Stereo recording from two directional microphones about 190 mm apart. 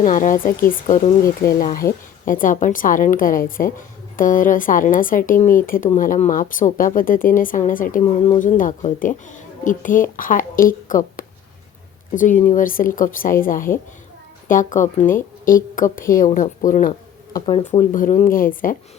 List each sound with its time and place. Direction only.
0.0 s speech: 45° left (ahead or behind)
8.0 s a woman's voice: 35° left (ahead or behind)
17.9 s speech: 45° left (ahead or behind)